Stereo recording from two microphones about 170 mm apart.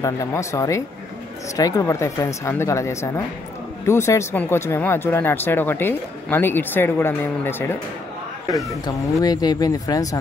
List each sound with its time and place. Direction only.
0.0 s speech: 20° left (ahead or behind)
8.8 s speech: 20° left (ahead or behind)